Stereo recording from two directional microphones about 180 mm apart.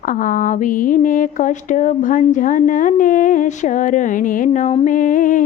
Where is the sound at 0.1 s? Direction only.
50° left (ahead or behind).